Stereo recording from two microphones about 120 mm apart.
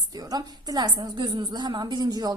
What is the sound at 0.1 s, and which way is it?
A woman's voice, 35° right (ahead or behind).